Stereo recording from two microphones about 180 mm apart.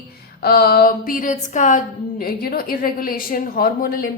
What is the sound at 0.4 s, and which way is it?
A woman's voice, 60° left (ahead or behind).